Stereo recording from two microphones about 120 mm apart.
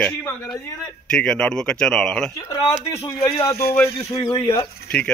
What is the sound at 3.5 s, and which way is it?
Speech, 30° left (ahead or behind).